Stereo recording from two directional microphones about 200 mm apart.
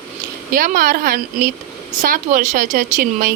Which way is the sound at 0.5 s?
45° right (ahead or behind).